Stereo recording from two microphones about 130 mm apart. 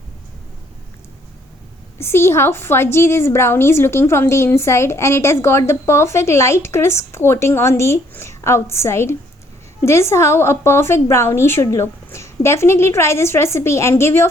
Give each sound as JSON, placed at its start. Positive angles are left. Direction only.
{"t": 2.0, "sound": "a woman's voice", "side_deg": 20}